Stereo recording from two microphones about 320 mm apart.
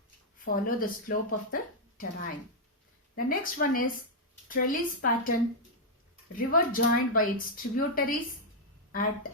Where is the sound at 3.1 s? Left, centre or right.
Left.